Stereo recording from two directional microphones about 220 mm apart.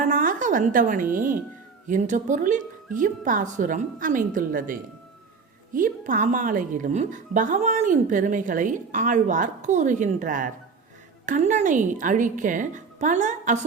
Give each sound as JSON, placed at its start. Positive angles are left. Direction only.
{"t": 0.0, "sound": "a woman's voice", "side_deg": -35}